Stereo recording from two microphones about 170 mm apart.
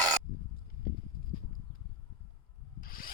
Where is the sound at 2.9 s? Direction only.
55° left (ahead or behind).